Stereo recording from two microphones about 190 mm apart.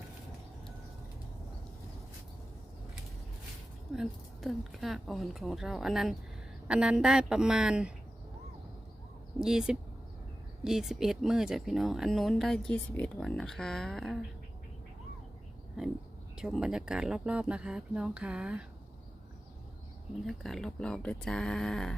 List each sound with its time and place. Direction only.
3.9 s speech: centre (ahead or behind)
9.4 s speech: 5° right (ahead or behind)
15.8 s speech: centre (ahead or behind)
20.2 s speech: centre (ahead or behind)